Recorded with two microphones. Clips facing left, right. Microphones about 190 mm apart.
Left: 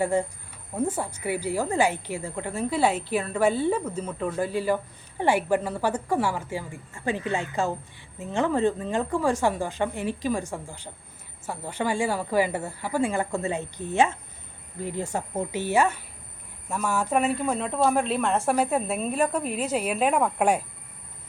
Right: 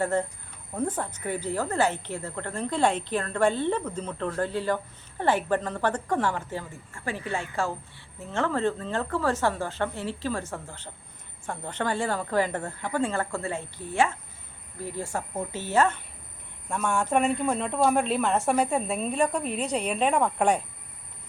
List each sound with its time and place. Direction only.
0.0 s speech: 10° left (ahead or behind)